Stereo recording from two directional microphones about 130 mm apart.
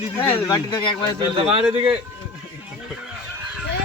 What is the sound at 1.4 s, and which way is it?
Speech, 45° right (ahead or behind).